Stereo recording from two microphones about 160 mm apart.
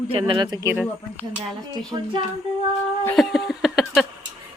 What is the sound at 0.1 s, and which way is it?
Speech, 35° right (ahead or behind).